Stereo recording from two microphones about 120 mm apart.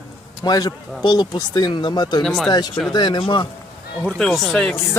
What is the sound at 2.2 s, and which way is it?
Speech, centre (ahead or behind).